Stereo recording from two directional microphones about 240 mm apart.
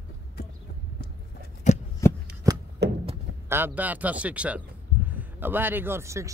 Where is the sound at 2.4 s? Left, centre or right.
Centre.